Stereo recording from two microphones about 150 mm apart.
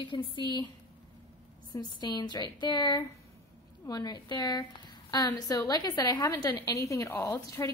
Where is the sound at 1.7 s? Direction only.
30° left (ahead or behind).